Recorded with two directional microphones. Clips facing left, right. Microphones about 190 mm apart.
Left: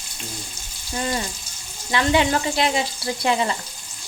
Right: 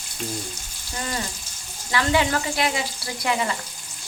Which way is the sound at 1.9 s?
20° left (ahead or behind).